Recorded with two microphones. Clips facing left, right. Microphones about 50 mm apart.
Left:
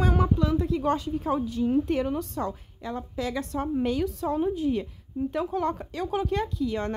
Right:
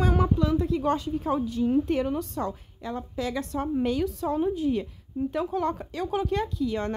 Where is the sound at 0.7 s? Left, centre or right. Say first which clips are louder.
Even; left.